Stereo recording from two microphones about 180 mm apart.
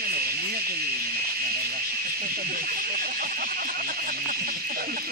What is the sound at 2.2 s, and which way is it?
Speech, 55° right (ahead or behind).